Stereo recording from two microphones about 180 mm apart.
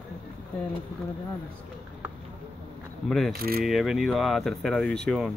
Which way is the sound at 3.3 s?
55° right (ahead or behind).